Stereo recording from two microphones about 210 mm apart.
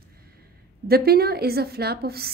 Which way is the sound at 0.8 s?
45° right (ahead or behind).